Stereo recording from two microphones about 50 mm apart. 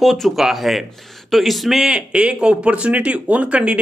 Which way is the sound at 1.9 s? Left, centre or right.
Right.